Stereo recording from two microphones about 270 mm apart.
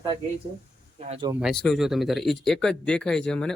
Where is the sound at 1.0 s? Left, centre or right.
Centre.